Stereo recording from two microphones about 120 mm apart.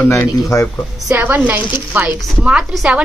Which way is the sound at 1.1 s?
15° right (ahead or behind).